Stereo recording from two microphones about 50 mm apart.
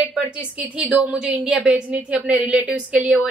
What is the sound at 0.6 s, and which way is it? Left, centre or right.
A woman's voice, right.